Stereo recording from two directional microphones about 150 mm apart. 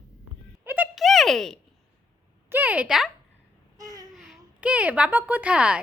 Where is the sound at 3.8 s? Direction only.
25° right (ahead or behind).